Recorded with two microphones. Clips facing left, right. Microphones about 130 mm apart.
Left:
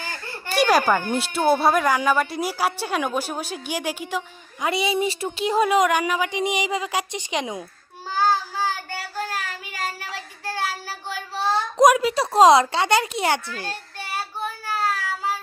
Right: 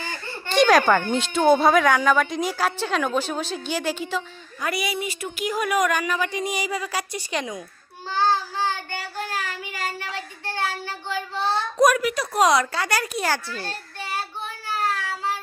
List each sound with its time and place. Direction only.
0.4 s speech: 10° left (ahead or behind)
4.6 s a sound: 25° left (ahead or behind)
8.1 s child singing: 5° left (ahead or behind)
10.4 s child singing: 10° left (ahead or behind)
11.3 s a sound: 10° left (ahead or behind)
13.7 s child singing: 10° left (ahead or behind)